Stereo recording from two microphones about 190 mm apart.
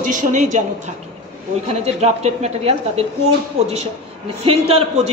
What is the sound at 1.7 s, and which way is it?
A man's voice, 35° right (ahead or behind).